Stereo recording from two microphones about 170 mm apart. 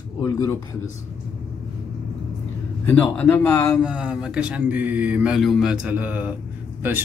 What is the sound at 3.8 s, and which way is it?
Speech, 5° right (ahead or behind).